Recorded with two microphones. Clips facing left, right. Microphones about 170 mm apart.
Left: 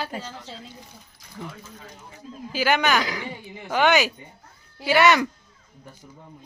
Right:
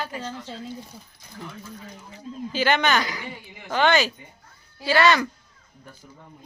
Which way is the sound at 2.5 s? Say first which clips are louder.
Even; 10° left (ahead or behind).